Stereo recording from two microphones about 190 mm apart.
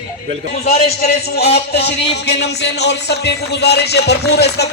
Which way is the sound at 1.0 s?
55° left (ahead or behind).